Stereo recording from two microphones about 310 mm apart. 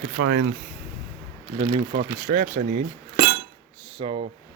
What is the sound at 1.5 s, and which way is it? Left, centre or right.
Speech, centre.